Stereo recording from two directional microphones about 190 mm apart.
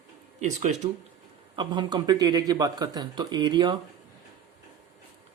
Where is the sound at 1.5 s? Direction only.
25° right (ahead or behind).